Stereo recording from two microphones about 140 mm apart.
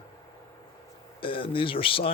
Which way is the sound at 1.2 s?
40° left (ahead or behind).